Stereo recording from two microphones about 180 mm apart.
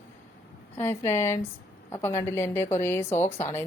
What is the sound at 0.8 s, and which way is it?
A woman's voice, 15° left (ahead or behind).